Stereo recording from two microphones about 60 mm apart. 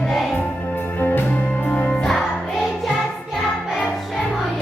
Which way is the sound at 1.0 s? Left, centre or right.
Left.